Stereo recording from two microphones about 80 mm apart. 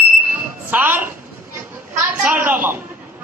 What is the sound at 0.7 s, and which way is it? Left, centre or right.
Speech, right.